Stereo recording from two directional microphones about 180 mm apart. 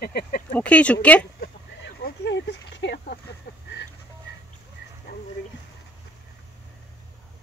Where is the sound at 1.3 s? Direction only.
65° left (ahead or behind).